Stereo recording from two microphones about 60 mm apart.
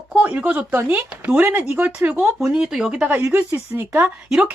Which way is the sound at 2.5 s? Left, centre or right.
Centre.